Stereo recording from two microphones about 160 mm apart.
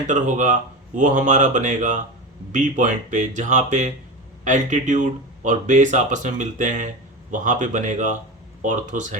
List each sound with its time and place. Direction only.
0.1 s speech: 50° right (ahead or behind)